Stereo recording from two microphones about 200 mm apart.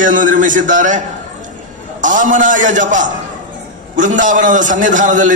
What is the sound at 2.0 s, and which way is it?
A man's voice, 40° right (ahead or behind).